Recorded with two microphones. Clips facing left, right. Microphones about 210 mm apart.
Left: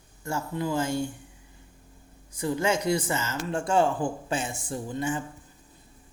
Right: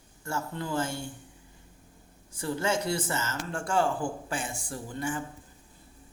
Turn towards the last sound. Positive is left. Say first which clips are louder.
# left 4 dB
turn(degrees=20)  # may be behind; listen again after turning